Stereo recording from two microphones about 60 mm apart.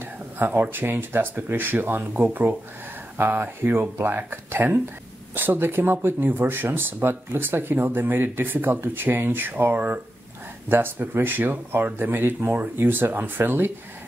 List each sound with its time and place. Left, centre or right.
0.0 s speech: right